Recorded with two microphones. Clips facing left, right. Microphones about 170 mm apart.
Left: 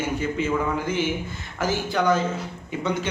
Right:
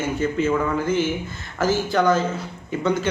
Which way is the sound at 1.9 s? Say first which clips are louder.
Right 1 dB; 15° left (ahead or behind).